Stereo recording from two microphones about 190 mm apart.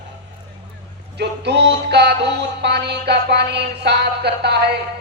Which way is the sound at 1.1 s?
60° right (ahead or behind).